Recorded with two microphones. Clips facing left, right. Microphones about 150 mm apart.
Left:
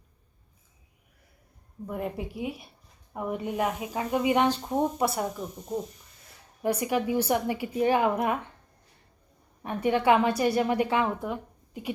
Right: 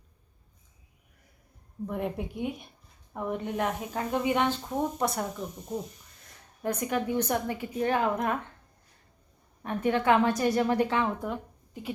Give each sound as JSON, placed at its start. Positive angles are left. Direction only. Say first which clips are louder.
{"t": 1.9, "sound": "a woman's voice", "louder": "even", "side_deg": 0}
{"t": 4.9, "sound": "a woman's voice", "louder": "left 2 dB", "side_deg": 5}
{"t": 6.6, "sound": "a woman's voice", "louder": "left 3 dB", "side_deg": 10}
{"t": 9.6, "sound": "a woman's voice", "louder": "left 2 dB", "side_deg": 10}